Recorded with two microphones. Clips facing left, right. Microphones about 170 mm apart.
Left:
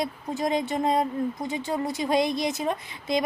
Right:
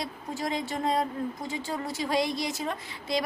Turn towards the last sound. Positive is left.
turn(degrees=20)  # may be behind; listen again after turning